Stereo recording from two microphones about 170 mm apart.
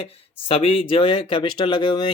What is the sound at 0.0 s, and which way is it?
Speech, 35° left (ahead or behind).